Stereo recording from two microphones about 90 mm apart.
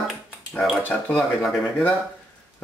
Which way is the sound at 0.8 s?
20° left (ahead or behind).